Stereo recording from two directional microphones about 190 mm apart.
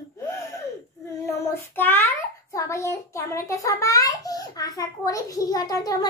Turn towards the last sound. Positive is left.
turn(degrees=20)  # may be behind; listen again after turning